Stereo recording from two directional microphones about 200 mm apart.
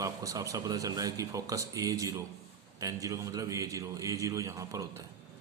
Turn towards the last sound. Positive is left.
turn(degrees=-15)  # may be behind; listen again after turning